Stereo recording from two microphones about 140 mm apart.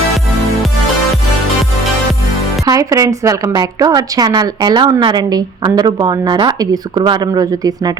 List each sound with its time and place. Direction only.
2.6 s a woman's voice: 25° right (ahead or behind)